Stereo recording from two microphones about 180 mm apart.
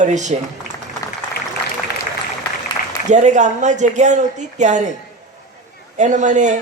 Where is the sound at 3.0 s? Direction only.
40° right (ahead or behind).